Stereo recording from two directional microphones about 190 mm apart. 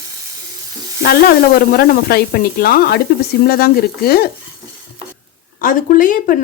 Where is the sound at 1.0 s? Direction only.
55° left (ahead or behind).